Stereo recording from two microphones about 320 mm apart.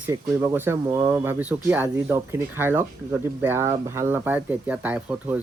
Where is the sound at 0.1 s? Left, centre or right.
Centre.